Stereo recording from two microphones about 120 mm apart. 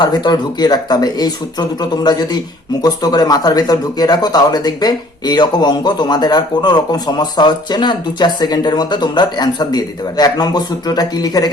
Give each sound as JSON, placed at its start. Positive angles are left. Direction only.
{"t": 0.0, "sound": "speech", "side_deg": 35}